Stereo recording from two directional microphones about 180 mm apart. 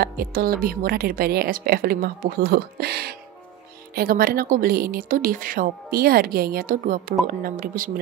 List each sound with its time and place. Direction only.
0.0 s a woman's voice: 55° right (ahead or behind)